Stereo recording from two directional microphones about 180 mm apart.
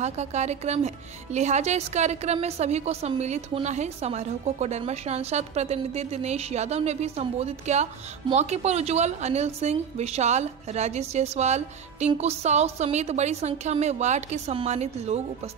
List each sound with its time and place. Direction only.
0.0 s speech: 40° right (ahead or behind)